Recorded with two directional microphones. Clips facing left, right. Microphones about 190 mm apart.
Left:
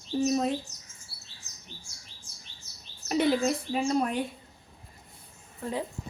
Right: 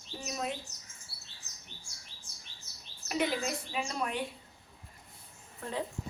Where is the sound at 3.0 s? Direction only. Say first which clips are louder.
Left 6 dB; 35° left (ahead or behind).